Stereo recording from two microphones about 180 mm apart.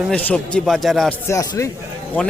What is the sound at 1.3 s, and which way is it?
Speech, 15° left (ahead or behind).